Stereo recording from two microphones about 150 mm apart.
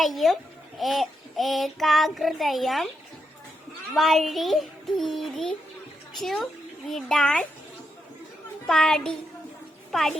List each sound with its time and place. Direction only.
0.0 s child singing: centre (ahead or behind)
3.9 s child singing: centre (ahead or behind)
6.1 s a child's voice: centre (ahead or behind)
8.6 s child singing: 5° left (ahead or behind)